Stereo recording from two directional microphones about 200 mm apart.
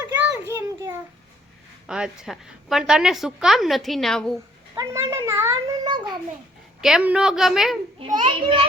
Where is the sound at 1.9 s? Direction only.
5° right (ahead or behind).